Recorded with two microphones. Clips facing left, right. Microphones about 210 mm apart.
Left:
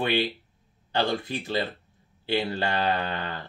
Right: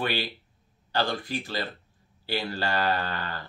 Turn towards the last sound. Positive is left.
turn(degrees=25)  # may be behind; listen again after turning